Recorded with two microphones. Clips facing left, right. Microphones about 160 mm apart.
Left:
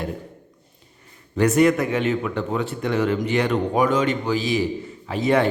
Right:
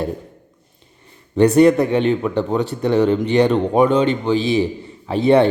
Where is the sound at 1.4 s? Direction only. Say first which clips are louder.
Right 5 dB; 30° right (ahead or behind).